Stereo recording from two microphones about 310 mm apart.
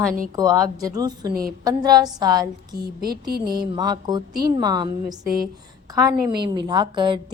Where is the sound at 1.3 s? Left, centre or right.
Right.